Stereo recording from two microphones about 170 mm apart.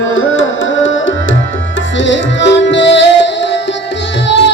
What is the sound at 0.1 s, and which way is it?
Tabla, 90° left.